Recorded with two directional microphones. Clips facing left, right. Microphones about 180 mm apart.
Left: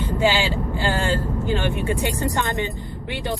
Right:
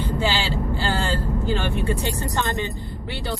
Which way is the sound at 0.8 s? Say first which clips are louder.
Left 5 dB; 15° left (ahead or behind).